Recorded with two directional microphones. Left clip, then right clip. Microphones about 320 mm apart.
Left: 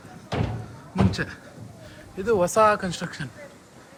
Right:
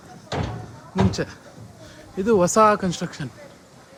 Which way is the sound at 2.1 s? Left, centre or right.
Right.